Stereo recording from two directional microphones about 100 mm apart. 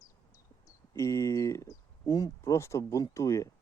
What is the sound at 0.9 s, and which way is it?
Speech, 30° left (ahead or behind).